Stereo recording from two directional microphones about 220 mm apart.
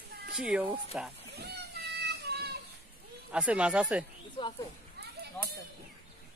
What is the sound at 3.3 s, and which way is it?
Speech, 5° right (ahead or behind).